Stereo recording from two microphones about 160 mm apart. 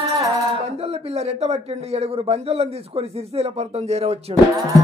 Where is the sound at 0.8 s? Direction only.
40° right (ahead or behind).